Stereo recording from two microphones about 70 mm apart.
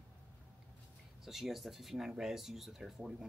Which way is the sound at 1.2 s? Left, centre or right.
Centre.